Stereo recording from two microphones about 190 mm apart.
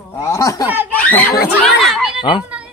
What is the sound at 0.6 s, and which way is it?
Speech, 10° right (ahead or behind).